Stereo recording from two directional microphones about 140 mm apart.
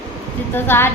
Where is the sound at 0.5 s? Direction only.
15° left (ahead or behind).